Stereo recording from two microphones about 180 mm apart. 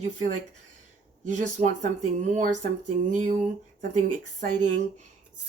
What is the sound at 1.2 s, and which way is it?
Speech, 40° right (ahead or behind).